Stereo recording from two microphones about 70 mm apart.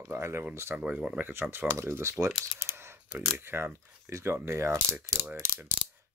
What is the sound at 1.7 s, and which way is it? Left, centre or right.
Speech, right.